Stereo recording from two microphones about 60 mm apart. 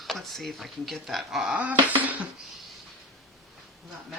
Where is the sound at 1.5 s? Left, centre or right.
Right.